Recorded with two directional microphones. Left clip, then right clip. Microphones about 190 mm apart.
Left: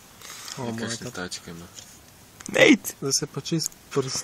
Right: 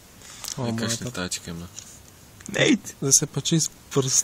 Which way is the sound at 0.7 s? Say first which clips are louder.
Right 3 dB; 40° right (ahead or behind).